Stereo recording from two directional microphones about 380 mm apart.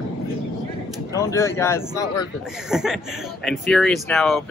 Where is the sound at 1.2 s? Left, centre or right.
Centre.